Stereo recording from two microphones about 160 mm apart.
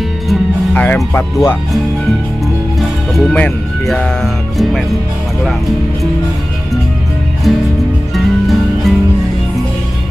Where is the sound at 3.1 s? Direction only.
5° left (ahead or behind).